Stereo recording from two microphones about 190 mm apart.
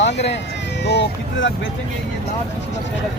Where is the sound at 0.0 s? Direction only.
65° left (ahead or behind).